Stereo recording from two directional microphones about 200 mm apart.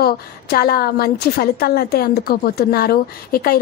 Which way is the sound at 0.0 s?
50° left (ahead or behind).